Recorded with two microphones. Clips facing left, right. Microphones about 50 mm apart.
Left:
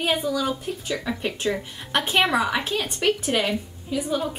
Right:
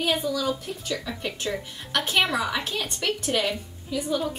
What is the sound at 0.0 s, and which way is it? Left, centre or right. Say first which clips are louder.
A woman's voice: left 2 dB; left.